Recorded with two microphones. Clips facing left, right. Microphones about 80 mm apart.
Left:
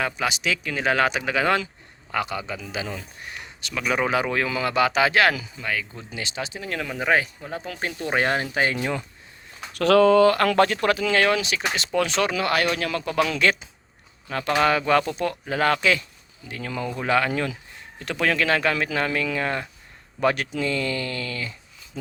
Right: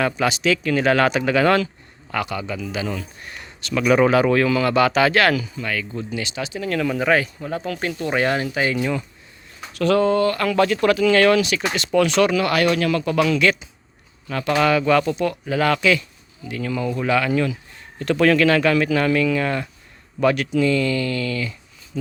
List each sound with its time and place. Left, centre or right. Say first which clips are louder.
0.0 s speech: right 5 dB; centre
3.2 s speech: right 5 dB; centre
4.1 s speech: right 7 dB; centre; by 9.0 s left
9.7 s speech: left 2 dB; left
10.4 s speech: right 1 dB; left
10.8 s speech: right 5 dB; left
18.0 s speech: right 7 dB; centre
18.4 s speech: right 6 dB; left